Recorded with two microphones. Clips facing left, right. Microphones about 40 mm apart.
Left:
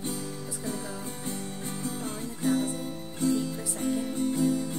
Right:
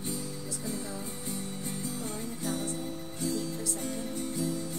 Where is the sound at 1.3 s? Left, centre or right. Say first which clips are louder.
Left 1 dB; left.